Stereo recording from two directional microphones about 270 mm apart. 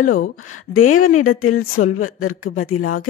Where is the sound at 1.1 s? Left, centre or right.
Left.